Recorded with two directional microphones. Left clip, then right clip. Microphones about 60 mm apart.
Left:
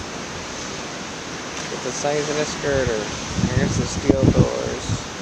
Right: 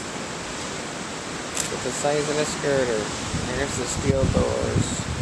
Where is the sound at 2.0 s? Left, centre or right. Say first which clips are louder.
Left 1 dB; left.